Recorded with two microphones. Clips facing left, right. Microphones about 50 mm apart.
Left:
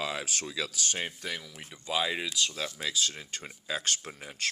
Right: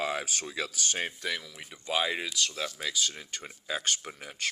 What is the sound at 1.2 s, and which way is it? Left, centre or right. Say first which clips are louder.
Speech: right 3 dB; right.